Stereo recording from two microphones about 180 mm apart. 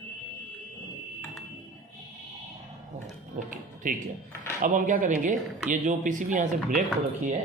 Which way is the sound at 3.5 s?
45° right (ahead or behind).